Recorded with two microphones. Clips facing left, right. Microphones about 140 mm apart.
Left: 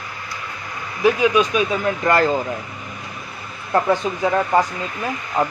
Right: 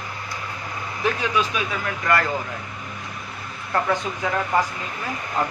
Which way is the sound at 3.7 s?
25° left (ahead or behind).